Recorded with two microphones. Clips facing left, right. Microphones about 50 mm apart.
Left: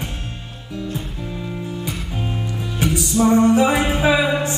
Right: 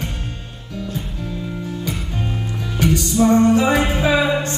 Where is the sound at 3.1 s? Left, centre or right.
Centre.